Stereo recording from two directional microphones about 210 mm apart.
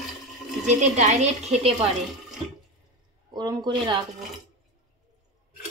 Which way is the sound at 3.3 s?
20° right (ahead or behind).